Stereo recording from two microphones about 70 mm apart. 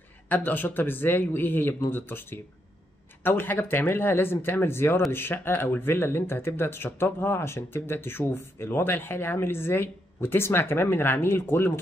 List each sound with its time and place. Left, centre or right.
0.3 s speech: left